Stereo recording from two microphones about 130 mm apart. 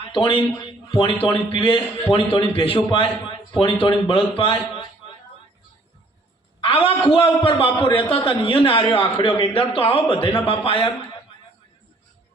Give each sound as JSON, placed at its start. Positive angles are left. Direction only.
{"t": 0.0, "sound": "a man's voice", "side_deg": 45}
{"t": 6.6, "sound": "a sound", "side_deg": 45}
{"t": 7.1, "sound": "a man's voice", "side_deg": 40}